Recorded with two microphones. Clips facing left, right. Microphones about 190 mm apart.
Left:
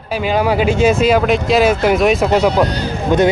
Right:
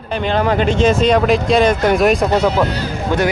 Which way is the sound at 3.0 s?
20° left (ahead or behind).